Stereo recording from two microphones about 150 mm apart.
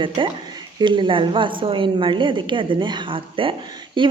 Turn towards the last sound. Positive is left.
turn(degrees=-35)  # may be behind; listen again after turning